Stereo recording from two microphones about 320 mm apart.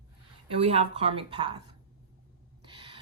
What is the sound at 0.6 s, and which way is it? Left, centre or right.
Speech, centre.